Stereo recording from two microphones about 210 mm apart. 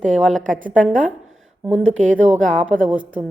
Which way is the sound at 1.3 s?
70° right (ahead or behind).